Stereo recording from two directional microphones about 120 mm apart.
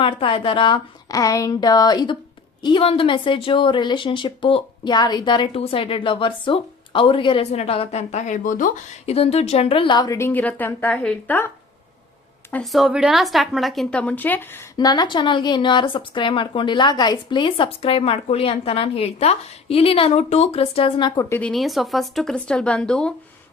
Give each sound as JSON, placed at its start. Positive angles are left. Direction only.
{"t": 0.0, "sound": "speech", "side_deg": 45}
{"t": 1.0, "sound": "a woman's voice", "side_deg": 30}
{"t": 5.5, "sound": "speech", "side_deg": 50}
{"t": 7.5, "sound": "speech", "side_deg": 60}
{"t": 9.1, "sound": "speech", "side_deg": 60}
{"t": 10.2, "sound": "a woman's voice", "side_deg": 15}
{"t": 12.7, "sound": "speech", "side_deg": -5}
{"t": 14.0, "sound": "a woman's voice", "side_deg": 15}
{"t": 14.8, "sound": "speech", "side_deg": 35}
{"t": 21.4, "sound": "speech", "side_deg": 0}